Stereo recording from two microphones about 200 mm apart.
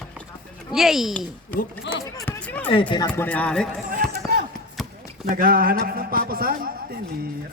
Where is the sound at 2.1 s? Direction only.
10° left (ahead or behind).